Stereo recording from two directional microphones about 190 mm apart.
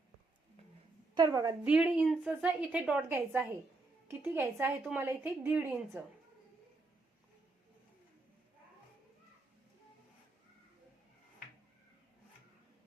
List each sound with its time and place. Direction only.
1.1 s a woman's voice: 20° right (ahead or behind)
1.6 s a woman's voice: 5° right (ahead or behind)